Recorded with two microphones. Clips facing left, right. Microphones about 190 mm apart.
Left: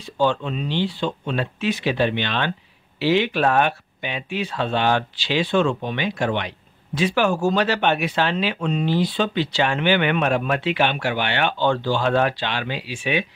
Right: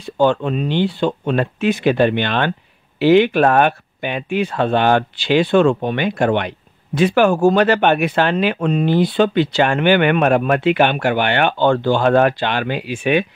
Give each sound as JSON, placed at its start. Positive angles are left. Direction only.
{"t": 0.0, "sound": "speech", "side_deg": -55}